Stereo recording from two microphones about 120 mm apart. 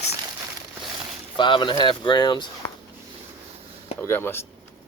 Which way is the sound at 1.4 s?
40° left (ahead or behind).